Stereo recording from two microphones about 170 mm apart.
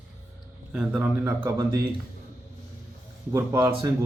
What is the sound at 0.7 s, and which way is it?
A man's voice, 5° right (ahead or behind).